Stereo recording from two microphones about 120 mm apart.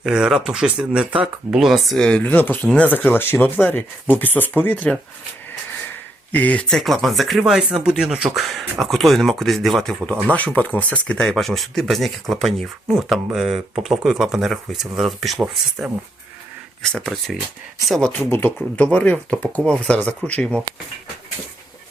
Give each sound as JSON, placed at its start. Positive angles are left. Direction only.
{"t": 0.0, "sound": "speech", "side_deg": -5}
{"t": 6.3, "sound": "speech", "side_deg": 10}
{"t": 18.1, "sound": "speech", "side_deg": 15}